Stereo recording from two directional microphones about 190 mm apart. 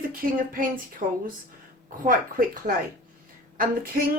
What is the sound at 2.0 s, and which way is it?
Speech, 45° right (ahead or behind).